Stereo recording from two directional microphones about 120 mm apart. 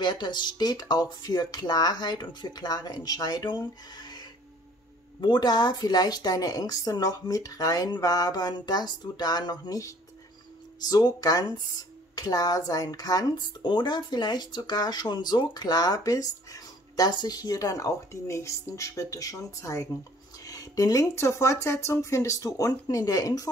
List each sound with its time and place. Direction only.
0.0 s speech: 40° left (ahead or behind)